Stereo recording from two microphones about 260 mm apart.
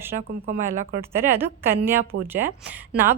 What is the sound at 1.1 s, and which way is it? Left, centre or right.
A woman's voice, centre.